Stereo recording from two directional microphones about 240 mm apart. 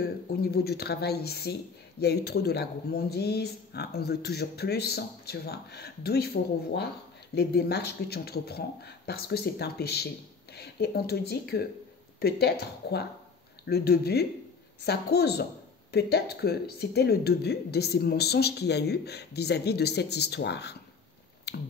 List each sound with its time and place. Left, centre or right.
0.4 s a woman's voice: left
21.5 s finger snapping: left